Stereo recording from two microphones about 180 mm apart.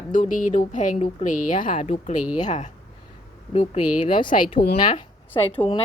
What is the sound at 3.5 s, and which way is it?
Speech, 30° left (ahead or behind).